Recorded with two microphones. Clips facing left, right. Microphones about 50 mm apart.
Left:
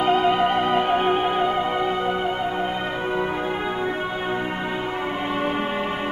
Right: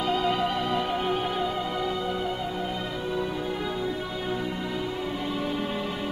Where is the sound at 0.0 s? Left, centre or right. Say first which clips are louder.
Left 7 dB; left.